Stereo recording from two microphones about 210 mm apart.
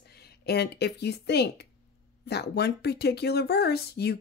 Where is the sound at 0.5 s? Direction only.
50° left (ahead or behind).